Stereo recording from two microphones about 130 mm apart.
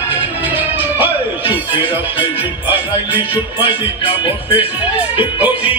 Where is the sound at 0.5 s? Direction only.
15° right (ahead or behind).